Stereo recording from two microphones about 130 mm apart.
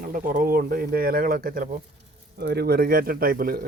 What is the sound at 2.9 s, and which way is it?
Speech, 90° right.